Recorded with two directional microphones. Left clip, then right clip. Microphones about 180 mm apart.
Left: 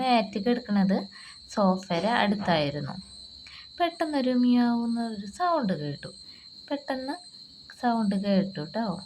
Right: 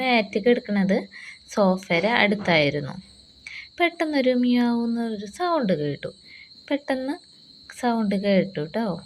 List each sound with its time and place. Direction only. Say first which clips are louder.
0.0 s a woman's voice: right 4 dB; 15° right (ahead or behind)